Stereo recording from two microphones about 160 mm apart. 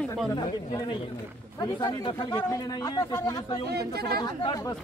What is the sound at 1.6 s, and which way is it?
Speech, 30° left (ahead or behind).